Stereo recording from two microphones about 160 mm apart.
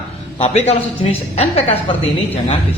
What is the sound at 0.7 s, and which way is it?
Speech, 40° left (ahead or behind).